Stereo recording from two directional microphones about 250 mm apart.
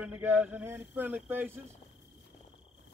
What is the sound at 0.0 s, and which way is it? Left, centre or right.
A man's voice, centre.